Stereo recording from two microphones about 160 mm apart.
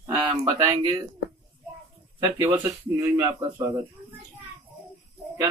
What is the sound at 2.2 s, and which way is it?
A man's voice, 15° right (ahead or behind).